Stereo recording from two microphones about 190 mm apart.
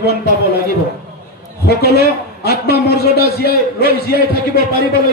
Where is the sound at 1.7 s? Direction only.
55° left (ahead or behind).